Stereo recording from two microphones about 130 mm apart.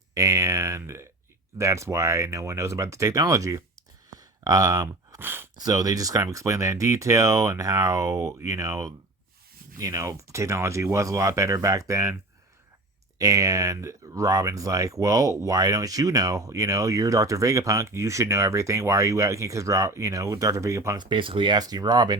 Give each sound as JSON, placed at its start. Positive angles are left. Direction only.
{"t": 0.1, "sound": "speech", "side_deg": -25}
{"t": 4.1, "sound": "a sound", "side_deg": -30}
{"t": 5.2, "sound": "speech", "side_deg": -15}
{"t": 5.6, "sound": "speech", "side_deg": -25}
{"t": 13.1, "sound": "speech", "side_deg": -25}
{"t": 21.0, "sound": "speech", "side_deg": -40}